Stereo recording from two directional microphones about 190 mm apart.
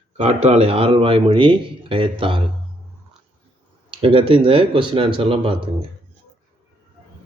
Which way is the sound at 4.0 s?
30° right (ahead or behind).